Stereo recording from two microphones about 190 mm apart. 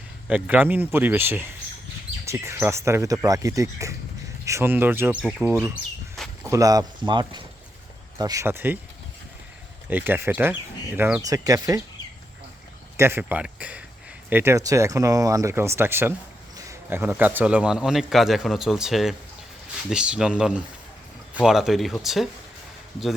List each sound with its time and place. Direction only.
0.3 s speech: 5° right (ahead or behind)
6.2 s walk: centre (ahead or behind)
6.5 s speech: 20° right (ahead or behind)
9.9 s speech: 10° right (ahead or behind)
13.0 s a man's voice: 10° right (ahead or behind)